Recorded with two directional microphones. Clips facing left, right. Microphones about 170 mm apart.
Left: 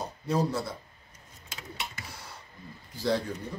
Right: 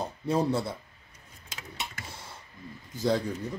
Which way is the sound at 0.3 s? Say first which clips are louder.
Right 2 dB; 25° right (ahead or behind).